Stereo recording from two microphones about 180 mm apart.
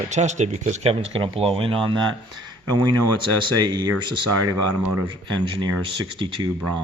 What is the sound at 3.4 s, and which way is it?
Speech, 25° right (ahead or behind).